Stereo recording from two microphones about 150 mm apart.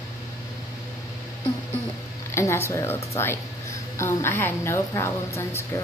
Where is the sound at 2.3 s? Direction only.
20° left (ahead or behind).